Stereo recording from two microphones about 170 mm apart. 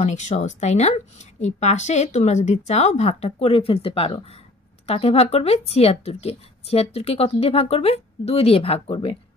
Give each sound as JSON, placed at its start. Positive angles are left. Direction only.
{"t": 0.0, "sound": "speech", "side_deg": 45}